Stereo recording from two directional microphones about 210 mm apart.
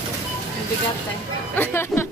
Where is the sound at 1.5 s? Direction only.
10° left (ahead or behind).